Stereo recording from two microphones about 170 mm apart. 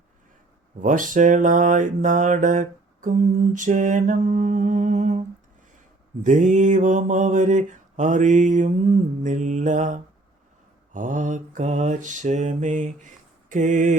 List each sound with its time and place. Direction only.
0.8 s mantra: 50° right (ahead or behind)
6.2 s mantra: 45° right (ahead or behind)